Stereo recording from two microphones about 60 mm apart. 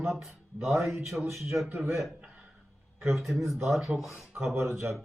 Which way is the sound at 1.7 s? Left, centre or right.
Right.